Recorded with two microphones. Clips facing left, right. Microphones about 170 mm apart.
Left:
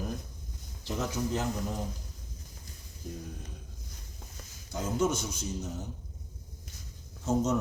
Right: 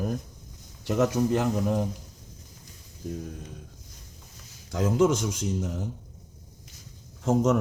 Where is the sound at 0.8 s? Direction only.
70° right (ahead or behind).